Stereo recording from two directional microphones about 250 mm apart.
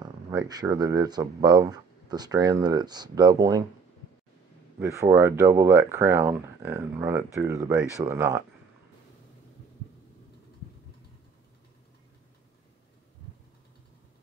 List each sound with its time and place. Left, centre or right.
0.0 s speech: centre
4.7 s speech: centre